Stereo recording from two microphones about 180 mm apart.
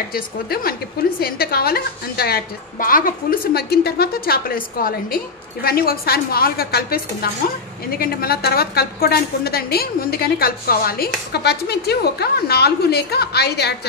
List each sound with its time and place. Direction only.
0.1 s a woman's voice: 55° left (ahead or behind)